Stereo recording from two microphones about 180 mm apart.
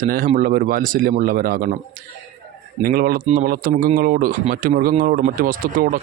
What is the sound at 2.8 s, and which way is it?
Speech, 55° right (ahead or behind).